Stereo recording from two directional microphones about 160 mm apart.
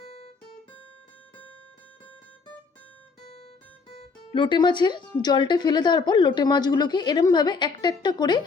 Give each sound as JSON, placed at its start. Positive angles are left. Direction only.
{"t": 0.0, "sound": "guitar", "side_deg": 40}
{"t": 3.9, "sound": "a woman's voice", "side_deg": 35}